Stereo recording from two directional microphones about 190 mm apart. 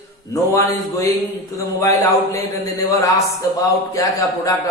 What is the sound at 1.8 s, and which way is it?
A man's voice, 15° left (ahead or behind).